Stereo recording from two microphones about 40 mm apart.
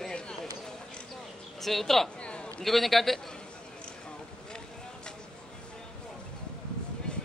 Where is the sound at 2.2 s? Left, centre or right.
Left.